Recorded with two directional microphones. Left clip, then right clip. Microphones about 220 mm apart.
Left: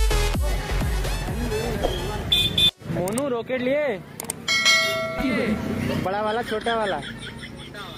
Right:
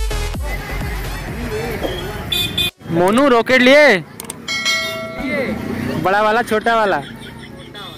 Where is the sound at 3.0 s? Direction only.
30° right (ahead or behind).